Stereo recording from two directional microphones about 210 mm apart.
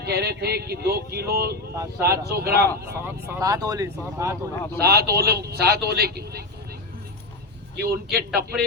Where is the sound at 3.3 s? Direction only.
15° right (ahead or behind).